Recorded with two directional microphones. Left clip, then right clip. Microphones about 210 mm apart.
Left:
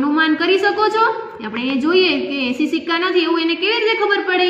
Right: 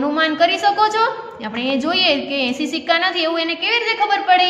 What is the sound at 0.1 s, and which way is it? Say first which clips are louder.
A man's voice: left 1 dB; 45° right (ahead or behind).